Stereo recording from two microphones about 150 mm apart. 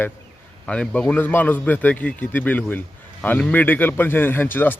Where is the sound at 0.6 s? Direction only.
5° left (ahead or behind).